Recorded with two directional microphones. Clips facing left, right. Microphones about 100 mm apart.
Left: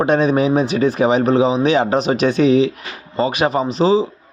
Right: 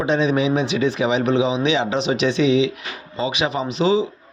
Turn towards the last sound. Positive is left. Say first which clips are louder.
# left 4 dB
turn(degrees=40)  # may be behind; listen again after turning